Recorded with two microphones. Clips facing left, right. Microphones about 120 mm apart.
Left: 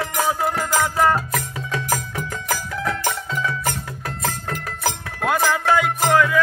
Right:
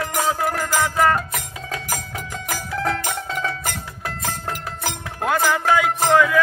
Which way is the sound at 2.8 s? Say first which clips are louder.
Right 4 dB; 35° right (ahead or behind).